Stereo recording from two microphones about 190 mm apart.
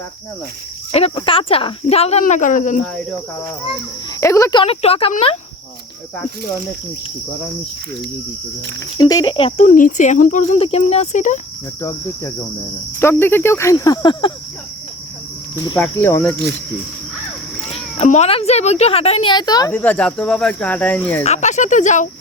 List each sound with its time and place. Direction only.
0.9 s speech: 30° left (ahead or behind)
2.8 s cricket: centre (ahead or behind)
4.2 s speech: 15° left (ahead or behind)
4.6 s speech: 30° left (ahead or behind)
9.0 s speech: 20° left (ahead or behind)
9.6 s speech: 45° left (ahead or behind)
11.8 s speech: 15° left (ahead or behind)
15.8 s speech: 10° left (ahead or behind)
17.7 s speech: 30° left (ahead or behind); by 21.2 s 10° left (ahead or behind)
21.2 s speech: 40° left (ahead or behind)